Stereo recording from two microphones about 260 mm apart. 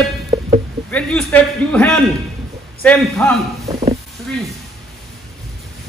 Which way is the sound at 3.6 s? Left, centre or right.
Right.